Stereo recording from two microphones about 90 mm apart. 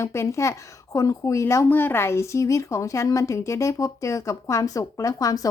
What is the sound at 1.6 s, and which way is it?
A woman's voice, 20° left (ahead or behind).